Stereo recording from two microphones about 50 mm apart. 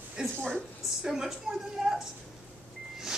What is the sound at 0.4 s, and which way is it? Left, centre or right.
Speech, left.